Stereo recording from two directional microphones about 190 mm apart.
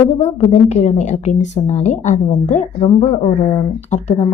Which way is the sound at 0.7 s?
35° left (ahead or behind).